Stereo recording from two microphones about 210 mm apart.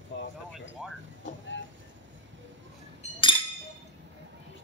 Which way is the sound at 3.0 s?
30° left (ahead or behind).